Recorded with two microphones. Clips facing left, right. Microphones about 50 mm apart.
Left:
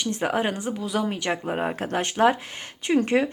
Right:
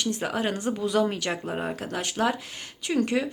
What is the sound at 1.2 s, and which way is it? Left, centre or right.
Speech, left.